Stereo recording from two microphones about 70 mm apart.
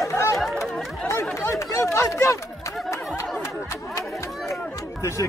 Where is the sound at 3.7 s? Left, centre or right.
Left.